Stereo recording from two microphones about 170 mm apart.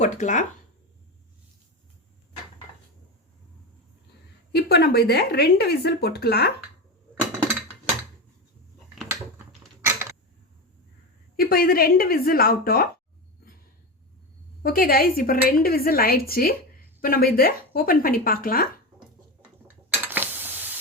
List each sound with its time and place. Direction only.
0.0 s speech: 45° left (ahead or behind)
4.5 s a woman's voice: 70° left (ahead or behind)
11.3 s speech: 60° left (ahead or behind)
14.6 s speech: 60° left (ahead or behind)
19.6 s dishes: 10° right (ahead or behind)